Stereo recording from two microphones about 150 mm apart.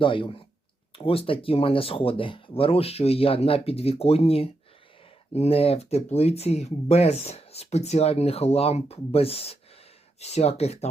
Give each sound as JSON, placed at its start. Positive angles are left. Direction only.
{"t": 0.0, "sound": "speech", "side_deg": 35}